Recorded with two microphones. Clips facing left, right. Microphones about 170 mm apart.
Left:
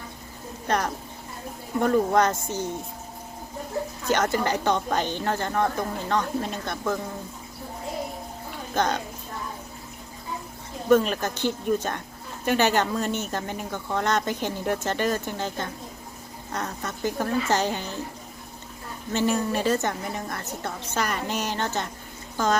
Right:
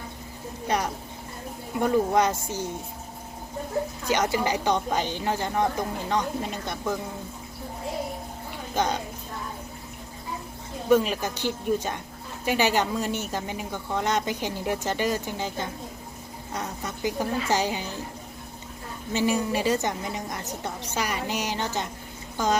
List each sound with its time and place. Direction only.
1.8 s speech: 10° right (ahead or behind)
4.0 s speech: 10° right (ahead or behind)
8.7 s a woman's voice: 10° right (ahead or behind)
10.8 s speech: 10° right (ahead or behind)
19.1 s speech: 10° right (ahead or behind)